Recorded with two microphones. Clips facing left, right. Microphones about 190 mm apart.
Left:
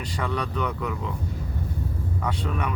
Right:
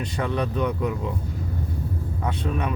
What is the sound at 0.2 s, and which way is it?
Speech, 25° right (ahead or behind).